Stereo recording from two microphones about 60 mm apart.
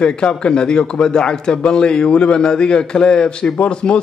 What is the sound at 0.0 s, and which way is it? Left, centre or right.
A man's voice, centre.